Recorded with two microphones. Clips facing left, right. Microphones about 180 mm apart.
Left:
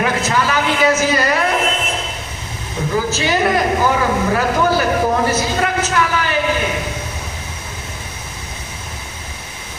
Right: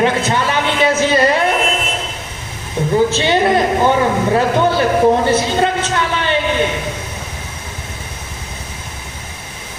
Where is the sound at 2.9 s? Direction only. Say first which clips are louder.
Right 4 dB; 25° right (ahead or behind).